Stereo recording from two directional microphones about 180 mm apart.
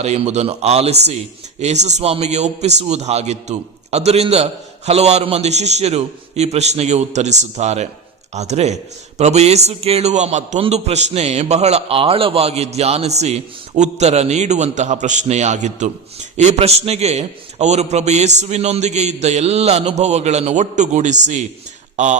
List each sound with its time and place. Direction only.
0.0 s a man's voice: 40° right (ahead or behind)